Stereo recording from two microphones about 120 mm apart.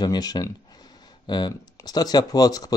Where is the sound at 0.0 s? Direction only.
35° left (ahead or behind).